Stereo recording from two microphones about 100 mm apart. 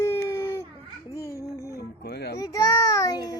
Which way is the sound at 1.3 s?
30° left (ahead or behind).